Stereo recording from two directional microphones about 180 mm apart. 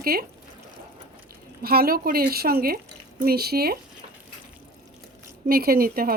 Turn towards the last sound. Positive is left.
turn(degrees=-55)  # may be behind; listen again after turning